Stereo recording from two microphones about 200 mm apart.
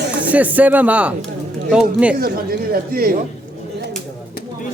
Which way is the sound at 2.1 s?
50° right (ahead or behind).